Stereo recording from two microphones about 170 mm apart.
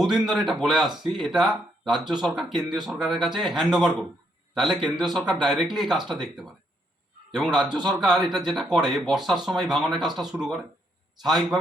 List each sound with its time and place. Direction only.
0.1 s speech: centre (ahead or behind)
7.7 s a man's voice: 25° right (ahead or behind)
8.0 s speech: centre (ahead or behind)